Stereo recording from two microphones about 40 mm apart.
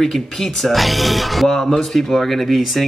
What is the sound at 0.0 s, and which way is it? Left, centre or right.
Speech, centre.